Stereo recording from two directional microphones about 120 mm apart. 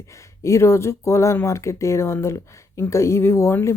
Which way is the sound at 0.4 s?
25° left (ahead or behind).